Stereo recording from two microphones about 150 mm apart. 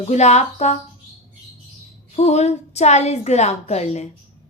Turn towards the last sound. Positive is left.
turn(degrees=45)  # may be behind; listen again after turning